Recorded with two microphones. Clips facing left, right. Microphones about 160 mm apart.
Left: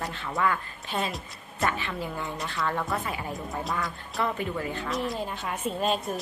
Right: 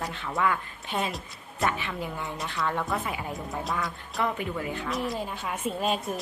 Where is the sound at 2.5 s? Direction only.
Centre (ahead or behind).